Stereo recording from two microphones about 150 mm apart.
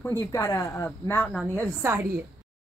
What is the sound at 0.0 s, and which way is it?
Speech, 20° left (ahead or behind).